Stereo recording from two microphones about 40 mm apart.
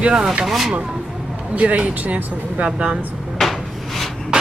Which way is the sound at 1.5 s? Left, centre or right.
Right.